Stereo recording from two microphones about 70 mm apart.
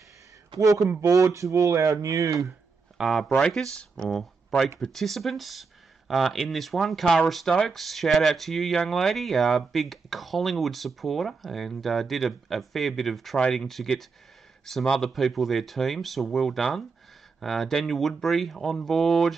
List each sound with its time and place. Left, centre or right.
1.0 s speech: right
3.0 s speech: centre
3.3 s speech: centre